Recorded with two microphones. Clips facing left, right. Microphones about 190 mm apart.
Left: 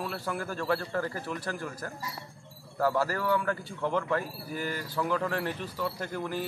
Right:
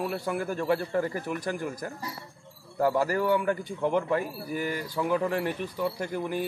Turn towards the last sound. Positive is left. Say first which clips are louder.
# right 3 dB
turn(degrees=-15)  # may be behind; listen again after turning